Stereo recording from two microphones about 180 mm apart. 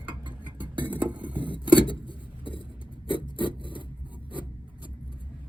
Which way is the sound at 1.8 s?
25° left (ahead or behind).